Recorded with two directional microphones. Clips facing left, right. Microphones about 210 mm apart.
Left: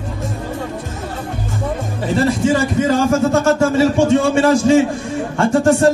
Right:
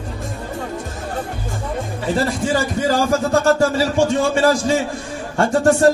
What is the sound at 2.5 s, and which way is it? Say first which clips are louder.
A man's voice: left 3 dB; 35° right (ahead or behind).